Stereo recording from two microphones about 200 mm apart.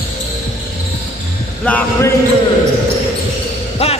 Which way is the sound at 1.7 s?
10° left (ahead or behind).